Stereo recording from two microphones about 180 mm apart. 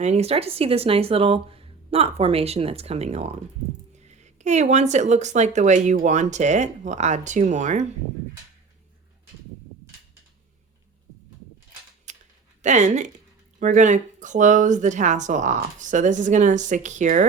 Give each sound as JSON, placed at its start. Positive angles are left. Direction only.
{"t": 0.0, "sound": "speech", "side_deg": -35}
{"t": 12.1, "sound": "a sound", "side_deg": -40}
{"t": 12.6, "sound": "speech", "side_deg": -40}